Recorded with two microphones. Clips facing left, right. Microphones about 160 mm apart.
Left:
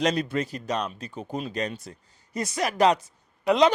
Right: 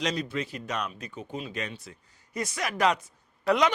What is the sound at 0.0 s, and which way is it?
A man's voice, 55° left (ahead or behind).